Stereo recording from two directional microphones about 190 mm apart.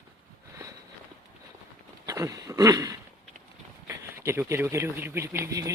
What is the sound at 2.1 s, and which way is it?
A woman's voice, 20° right (ahead or behind).